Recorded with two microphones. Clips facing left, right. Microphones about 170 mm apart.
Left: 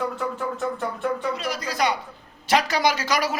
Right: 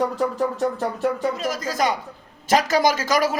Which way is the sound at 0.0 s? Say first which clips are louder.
Right 5 dB; 35° right (ahead or behind).